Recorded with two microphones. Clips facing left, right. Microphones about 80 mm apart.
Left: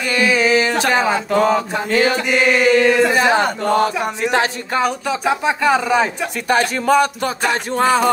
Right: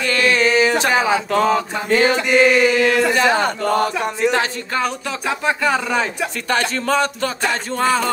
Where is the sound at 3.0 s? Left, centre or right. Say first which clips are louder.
Left 1 dB; centre.